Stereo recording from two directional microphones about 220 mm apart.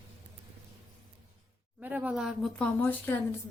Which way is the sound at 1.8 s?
5° right (ahead or behind).